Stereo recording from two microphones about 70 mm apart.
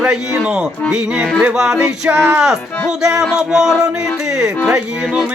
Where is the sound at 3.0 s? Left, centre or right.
Centre.